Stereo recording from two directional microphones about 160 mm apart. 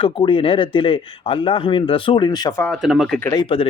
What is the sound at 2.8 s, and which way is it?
Speech, centre (ahead or behind).